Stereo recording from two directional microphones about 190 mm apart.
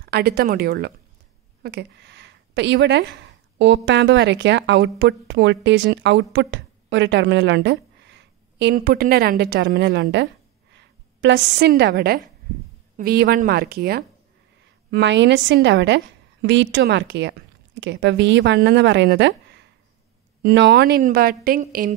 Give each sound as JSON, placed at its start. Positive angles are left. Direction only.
{"t": 0.0, "sound": "a woman's voice", "side_deg": -55}
{"t": 14.9, "sound": "a woman's voice", "side_deg": -65}
{"t": 21.0, "sound": "a woman's voice", "side_deg": -50}